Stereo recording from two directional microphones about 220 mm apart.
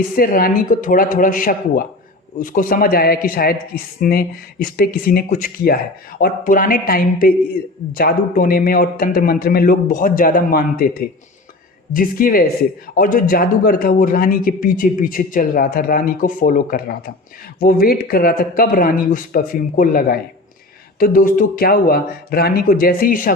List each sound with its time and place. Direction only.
0.2 s a man's voice: 40° left (ahead or behind)